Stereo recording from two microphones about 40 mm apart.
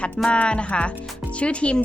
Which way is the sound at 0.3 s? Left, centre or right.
Left.